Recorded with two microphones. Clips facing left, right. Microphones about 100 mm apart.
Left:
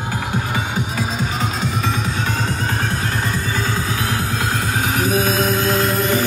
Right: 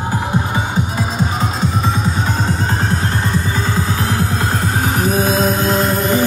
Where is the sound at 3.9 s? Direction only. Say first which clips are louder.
Right 3 dB; 30° right (ahead or behind).